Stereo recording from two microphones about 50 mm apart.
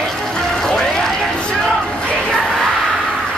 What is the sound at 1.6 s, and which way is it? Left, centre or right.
Crowd, centre.